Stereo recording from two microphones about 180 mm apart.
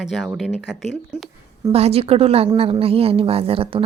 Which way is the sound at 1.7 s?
35° right (ahead or behind).